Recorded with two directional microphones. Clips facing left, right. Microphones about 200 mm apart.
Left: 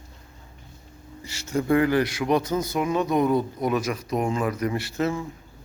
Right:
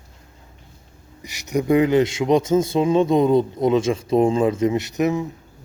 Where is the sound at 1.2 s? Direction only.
15° right (ahead or behind).